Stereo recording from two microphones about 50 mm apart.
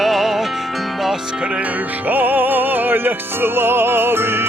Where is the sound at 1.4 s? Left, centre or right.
Right.